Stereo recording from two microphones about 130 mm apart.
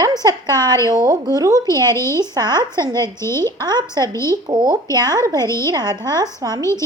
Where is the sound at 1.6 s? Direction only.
20° left (ahead or behind).